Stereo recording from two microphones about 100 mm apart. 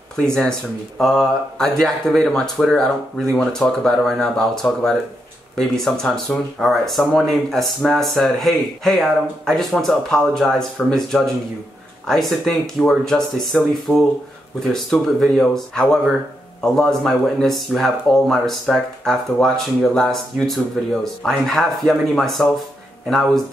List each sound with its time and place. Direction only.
0.1 s speech: 5° left (ahead or behind)
13.9 s speech: 15° left (ahead or behind)
14.6 s speech: centre (ahead or behind)